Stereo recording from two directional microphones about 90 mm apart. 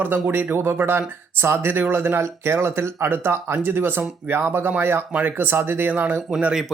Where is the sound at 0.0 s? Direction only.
20° right (ahead or behind).